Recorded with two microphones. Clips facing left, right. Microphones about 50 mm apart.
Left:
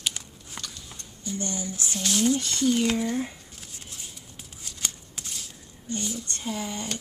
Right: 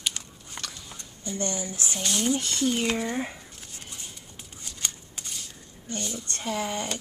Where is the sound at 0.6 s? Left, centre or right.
Right.